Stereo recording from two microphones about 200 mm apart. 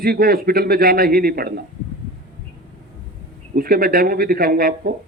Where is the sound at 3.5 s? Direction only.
50° right (ahead or behind).